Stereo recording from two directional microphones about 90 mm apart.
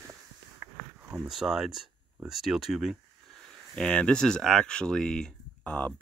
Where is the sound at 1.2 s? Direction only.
5° right (ahead or behind).